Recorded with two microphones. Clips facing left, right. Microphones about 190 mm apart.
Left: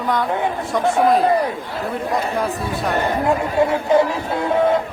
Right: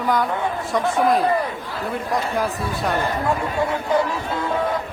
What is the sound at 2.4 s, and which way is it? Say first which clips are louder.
Speech: left 1 dB; centre (ahead or behind).